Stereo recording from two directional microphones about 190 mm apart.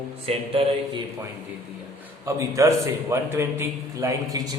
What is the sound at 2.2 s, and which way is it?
A man's voice, 15° right (ahead or behind).